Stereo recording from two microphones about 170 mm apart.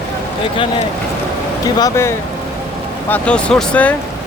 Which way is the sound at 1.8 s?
20° left (ahead or behind).